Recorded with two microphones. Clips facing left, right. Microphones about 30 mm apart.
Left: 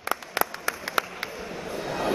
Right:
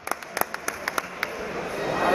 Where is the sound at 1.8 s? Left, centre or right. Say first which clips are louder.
Right 4 dB; right.